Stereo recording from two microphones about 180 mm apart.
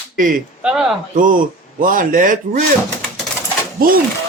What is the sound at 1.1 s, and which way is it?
Speech, 50° right (ahead or behind).